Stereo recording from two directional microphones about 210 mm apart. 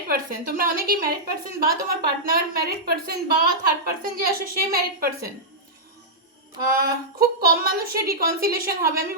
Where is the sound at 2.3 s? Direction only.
45° right (ahead or behind).